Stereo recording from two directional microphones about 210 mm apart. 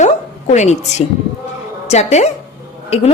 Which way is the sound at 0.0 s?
35° left (ahead or behind).